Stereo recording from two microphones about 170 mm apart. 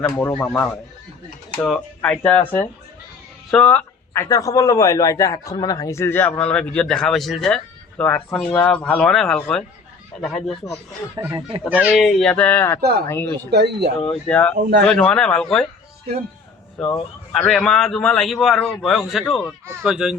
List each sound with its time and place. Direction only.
0.4 s a man's voice: 10° left (ahead or behind)
11.3 s speech: 25° right (ahead or behind)
11.6 s a man's voice: 5° right (ahead or behind); by 13.5 s 10° left (ahead or behind)
13.5 s speech: 75° right (ahead or behind)
14.1 s speech: 5° left (ahead or behind)
14.5 s speech: 80° right
14.8 s a man's voice: 5° left (ahead or behind)
16.8 s a man's voice: 5° left (ahead or behind)